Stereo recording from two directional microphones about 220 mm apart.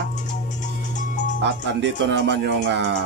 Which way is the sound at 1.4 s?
50° right (ahead or behind).